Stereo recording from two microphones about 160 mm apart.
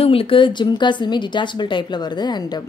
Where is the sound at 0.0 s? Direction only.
35° left (ahead or behind).